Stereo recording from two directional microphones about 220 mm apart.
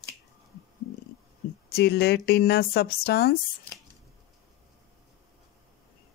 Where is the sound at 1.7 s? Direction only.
45° left (ahead or behind).